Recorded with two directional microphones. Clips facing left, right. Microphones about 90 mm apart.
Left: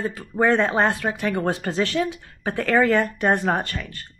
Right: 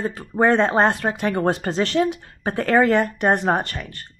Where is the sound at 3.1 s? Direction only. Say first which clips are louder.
Right 2 dB; 15° right (ahead or behind).